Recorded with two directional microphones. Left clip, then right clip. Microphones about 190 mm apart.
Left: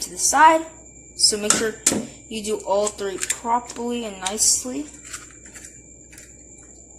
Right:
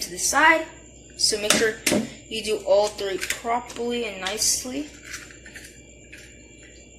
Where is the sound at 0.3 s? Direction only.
60° left (ahead or behind).